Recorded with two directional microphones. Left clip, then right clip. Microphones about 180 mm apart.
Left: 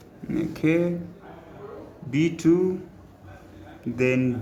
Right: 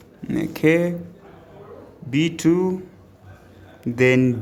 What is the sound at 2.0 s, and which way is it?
Speech, 40° right (ahead or behind).